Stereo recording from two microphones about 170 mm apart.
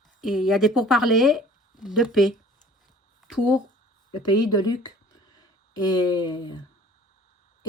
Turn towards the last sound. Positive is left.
turn(degrees=25)  # may be behind; listen again after turning